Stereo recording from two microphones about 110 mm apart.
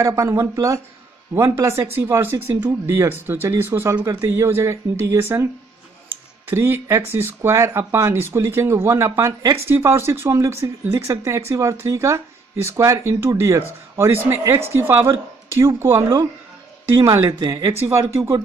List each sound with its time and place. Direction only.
0.0 s speech: 25° right (ahead or behind)
3.9 s speech: 35° right (ahead or behind)
4.2 s speech: 20° right (ahead or behind)
6.5 s speech: 25° right (ahead or behind)
17.8 s speech: 25° right (ahead or behind)